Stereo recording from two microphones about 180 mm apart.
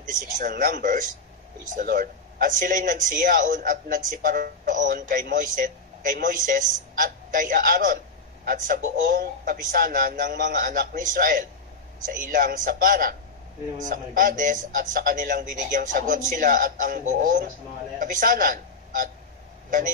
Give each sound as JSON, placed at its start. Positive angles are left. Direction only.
{"t": 0.4, "sound": "a man's voice", "side_deg": -50}